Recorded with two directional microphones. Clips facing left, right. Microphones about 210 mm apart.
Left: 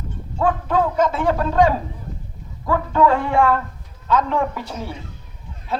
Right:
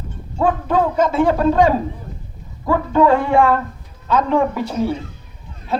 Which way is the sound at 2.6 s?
20° right (ahead or behind).